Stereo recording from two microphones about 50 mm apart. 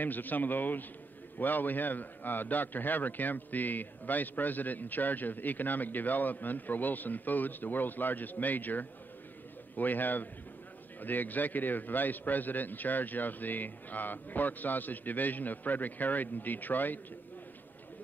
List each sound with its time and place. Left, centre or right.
0.0 s a man's voice: left